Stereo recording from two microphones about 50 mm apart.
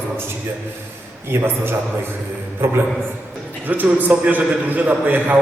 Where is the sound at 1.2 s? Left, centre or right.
Right.